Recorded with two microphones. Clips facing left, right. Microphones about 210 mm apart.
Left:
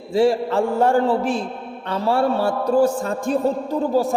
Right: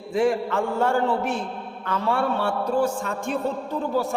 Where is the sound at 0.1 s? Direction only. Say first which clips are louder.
Left 4 dB; 30° left (ahead or behind).